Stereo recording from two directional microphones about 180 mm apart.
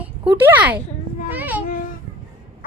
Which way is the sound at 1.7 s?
50° left (ahead or behind).